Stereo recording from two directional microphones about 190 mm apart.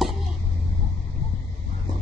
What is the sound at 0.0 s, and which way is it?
Vehicle, centre (ahead or behind).